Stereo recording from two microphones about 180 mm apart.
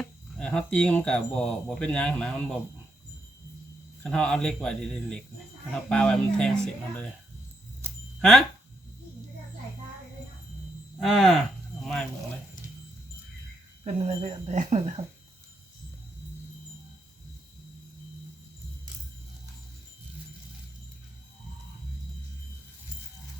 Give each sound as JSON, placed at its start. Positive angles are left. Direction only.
{"t": 0.0, "sound": "speech", "side_deg": 5}
{"t": 4.0, "sound": "speech", "side_deg": 5}
{"t": 8.2, "sound": "speech", "side_deg": 0}
{"t": 11.0, "sound": "speech", "side_deg": 0}
{"t": 13.8, "sound": "speech", "side_deg": -35}